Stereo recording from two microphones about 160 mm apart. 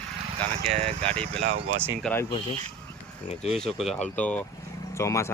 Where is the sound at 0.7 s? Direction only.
40° right (ahead or behind).